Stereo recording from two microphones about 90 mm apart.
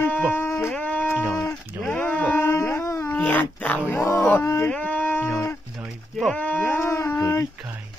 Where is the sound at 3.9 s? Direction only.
30° left (ahead or behind).